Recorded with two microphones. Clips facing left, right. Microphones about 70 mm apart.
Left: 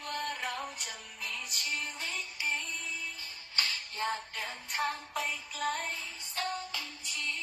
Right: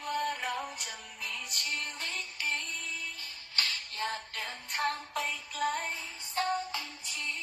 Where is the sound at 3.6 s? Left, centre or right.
Left.